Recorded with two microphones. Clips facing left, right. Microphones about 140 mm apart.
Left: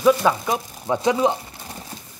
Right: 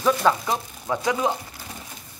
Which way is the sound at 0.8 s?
25° left (ahead or behind).